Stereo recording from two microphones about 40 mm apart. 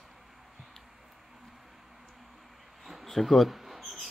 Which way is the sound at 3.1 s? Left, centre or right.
Centre.